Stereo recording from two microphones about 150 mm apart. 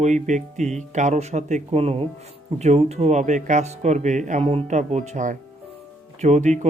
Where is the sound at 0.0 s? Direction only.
50° right (ahead or behind).